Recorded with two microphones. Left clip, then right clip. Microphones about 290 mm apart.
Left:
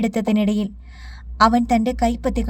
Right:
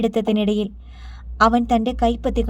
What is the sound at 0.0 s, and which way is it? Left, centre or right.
A woman's voice, left.